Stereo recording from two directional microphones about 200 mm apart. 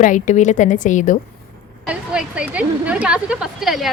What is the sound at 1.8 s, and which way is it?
A woman's voice, 5° right (ahead or behind).